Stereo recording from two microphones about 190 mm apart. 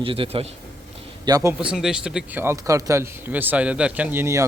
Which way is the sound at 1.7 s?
5° right (ahead or behind).